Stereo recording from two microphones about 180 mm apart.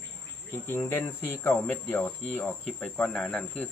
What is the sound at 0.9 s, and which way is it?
Speech, 10° left (ahead or behind).